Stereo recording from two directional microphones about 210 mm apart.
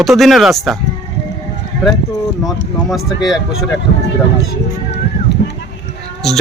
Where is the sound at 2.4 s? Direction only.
Centre (ahead or behind).